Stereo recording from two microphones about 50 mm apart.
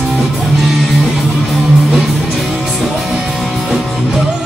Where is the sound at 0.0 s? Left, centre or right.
Centre.